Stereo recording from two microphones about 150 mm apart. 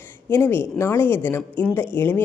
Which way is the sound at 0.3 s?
15° left (ahead or behind).